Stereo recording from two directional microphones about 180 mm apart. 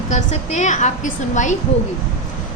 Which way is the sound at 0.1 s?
40° left (ahead or behind).